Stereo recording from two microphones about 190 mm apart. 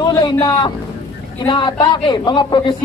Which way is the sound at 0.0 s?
20° left (ahead or behind).